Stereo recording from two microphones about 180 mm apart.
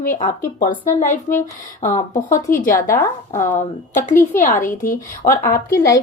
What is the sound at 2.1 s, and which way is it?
Speech, 15° left (ahead or behind).